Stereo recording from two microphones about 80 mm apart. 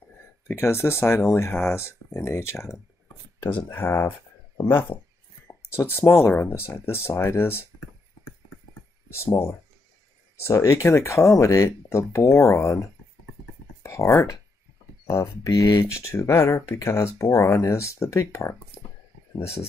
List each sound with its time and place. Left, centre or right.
0.5 s speech: left
3.8 s speech: left
5.5 s speech: left
9.1 s speech: left